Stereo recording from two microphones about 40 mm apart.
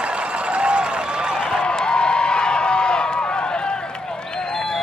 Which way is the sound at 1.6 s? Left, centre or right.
Centre.